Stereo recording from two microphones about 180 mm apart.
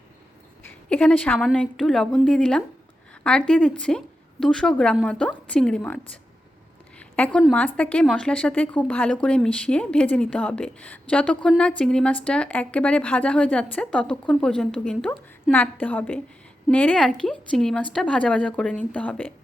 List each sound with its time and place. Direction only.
0.9 s a woman's voice: 10° left (ahead or behind)
7.0 s a sound: 5° left (ahead or behind)
7.5 s a woman's voice: 10° left (ahead or behind)